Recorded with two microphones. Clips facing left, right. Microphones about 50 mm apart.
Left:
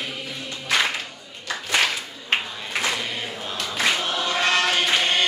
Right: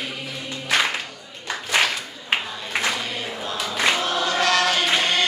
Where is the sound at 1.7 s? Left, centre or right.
Centre.